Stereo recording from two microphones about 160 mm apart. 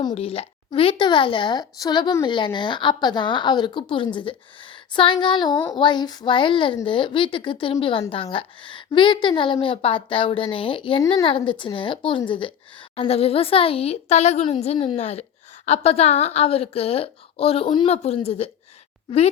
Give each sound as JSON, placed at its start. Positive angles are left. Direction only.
{"t": 0.1, "sound": "a woman's voice", "side_deg": 40}